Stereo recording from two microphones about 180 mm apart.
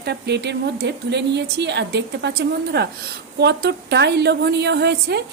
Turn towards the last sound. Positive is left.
turn(degrees=-70)  # may be behind; listen again after turning